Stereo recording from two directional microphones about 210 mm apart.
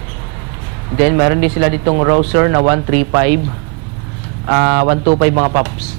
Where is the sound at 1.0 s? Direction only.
15° right (ahead or behind).